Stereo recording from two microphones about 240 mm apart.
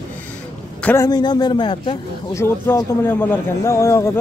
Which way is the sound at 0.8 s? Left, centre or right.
Centre.